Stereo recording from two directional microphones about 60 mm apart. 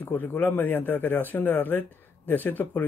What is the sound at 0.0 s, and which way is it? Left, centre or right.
Speech, left.